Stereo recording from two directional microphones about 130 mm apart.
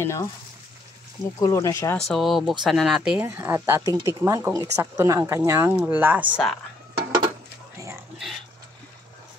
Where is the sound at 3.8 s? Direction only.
30° right (ahead or behind); by 6.2 s 15° right (ahead or behind).